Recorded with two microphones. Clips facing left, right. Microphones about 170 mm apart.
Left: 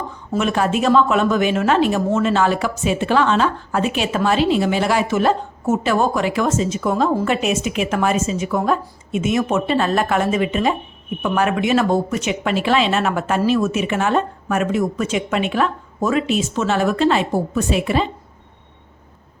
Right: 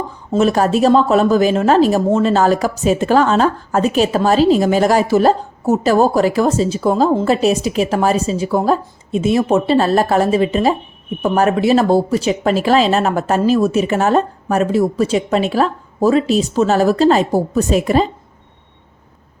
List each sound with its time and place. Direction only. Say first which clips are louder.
0.3 s speech: right 5 dB; 35° right (ahead or behind)